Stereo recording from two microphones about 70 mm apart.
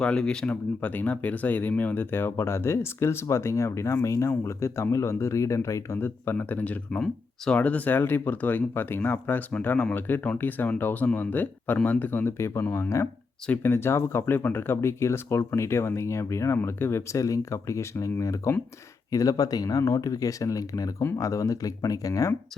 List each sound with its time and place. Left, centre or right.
0.0 s speech: centre; by 6.0 s left
6.3 s speech: left
17.2 s speech: left
19.1 s speech: left